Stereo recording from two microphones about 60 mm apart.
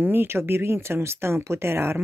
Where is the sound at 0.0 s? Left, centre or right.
Right.